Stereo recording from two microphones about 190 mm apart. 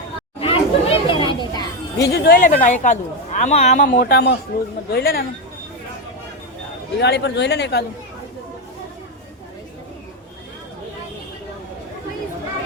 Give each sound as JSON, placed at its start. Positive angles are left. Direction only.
{"t": 0.3, "sound": "chatter", "side_deg": 30}
{"t": 2.0, "sound": "a woman's voice", "side_deg": 60}
{"t": 7.0, "sound": "speech", "side_deg": 60}